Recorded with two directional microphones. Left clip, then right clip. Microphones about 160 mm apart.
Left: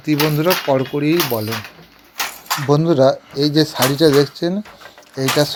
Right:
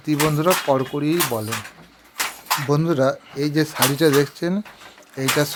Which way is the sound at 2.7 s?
Centre (ahead or behind).